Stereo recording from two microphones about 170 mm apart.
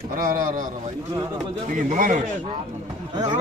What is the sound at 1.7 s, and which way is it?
Speech, 50° right (ahead or behind).